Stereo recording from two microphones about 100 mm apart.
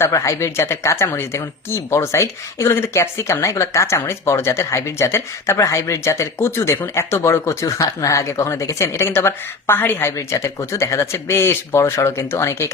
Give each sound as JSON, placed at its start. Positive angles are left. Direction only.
{"t": 0.0, "sound": "speech", "side_deg": 30}